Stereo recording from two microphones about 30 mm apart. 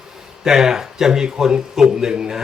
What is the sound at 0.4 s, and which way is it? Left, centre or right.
Speech, centre.